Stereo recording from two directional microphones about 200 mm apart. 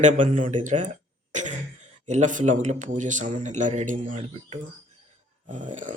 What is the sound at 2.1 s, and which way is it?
Speech, 35° right (ahead or behind).